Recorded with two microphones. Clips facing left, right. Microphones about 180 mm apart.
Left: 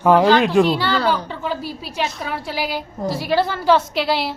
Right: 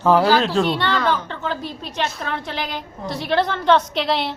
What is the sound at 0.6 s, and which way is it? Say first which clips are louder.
A woman's voice: left 2 dB; 5° left (ahead or behind).